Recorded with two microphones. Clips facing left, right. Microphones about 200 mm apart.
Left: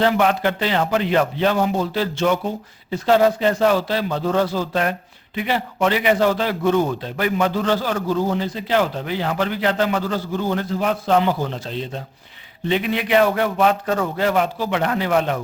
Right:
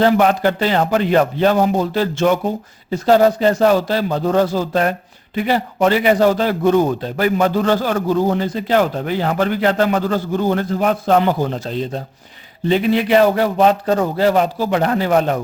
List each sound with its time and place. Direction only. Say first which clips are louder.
0.0 s a man's voice: right 4 dB; 40° right (ahead or behind)